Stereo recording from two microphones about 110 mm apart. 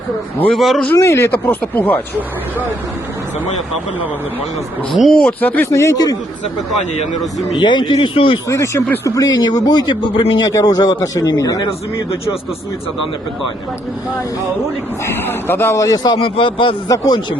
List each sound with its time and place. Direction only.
0.4 s speech: centre (ahead or behind)
0.9 s speech: 25° left (ahead or behind)
4.9 s speech: centre (ahead or behind)
5.2 s speech: 15° left (ahead or behind); by 6.1 s 30° left (ahead or behind)
7.2 s speech: centre (ahead or behind)
7.6 s speech: 45° left (ahead or behind)
8.4 s a man's voice: 25° left (ahead or behind); by 10.5 s 45° left (ahead or behind)
10.5 s a man's voice: 35° left (ahead or behind)
15.0 s speech: 20° left (ahead or behind)
16.1 s speech: 55° left (ahead or behind)
16.9 s a man's voice: 30° left (ahead or behind)